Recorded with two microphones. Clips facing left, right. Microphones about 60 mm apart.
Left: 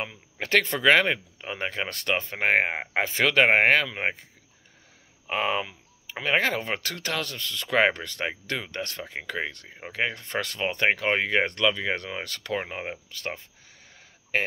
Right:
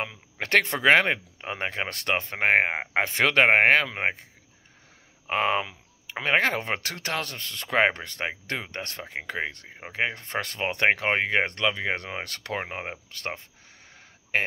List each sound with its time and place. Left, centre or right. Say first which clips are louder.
0.1 s speech: even; right
5.2 s speech: right 2 dB; right
5.7 s speech: right 1 dB; right
7.6 s speech: even; right
13.1 s speech: right 2 dB; right
14.3 s speech: even; right